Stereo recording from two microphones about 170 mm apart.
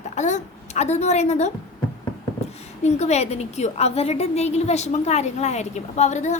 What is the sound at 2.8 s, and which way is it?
A woman's voice, 40° left (ahead or behind).